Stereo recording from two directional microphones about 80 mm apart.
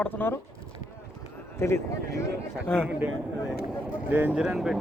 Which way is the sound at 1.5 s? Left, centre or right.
Left.